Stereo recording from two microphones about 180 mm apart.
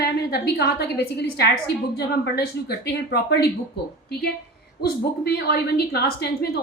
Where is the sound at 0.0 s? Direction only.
65° left (ahead or behind).